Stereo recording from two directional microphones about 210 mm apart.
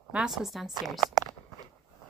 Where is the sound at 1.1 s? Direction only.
20° right (ahead or behind).